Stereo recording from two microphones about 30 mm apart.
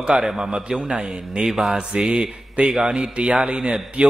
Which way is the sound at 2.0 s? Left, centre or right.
Right.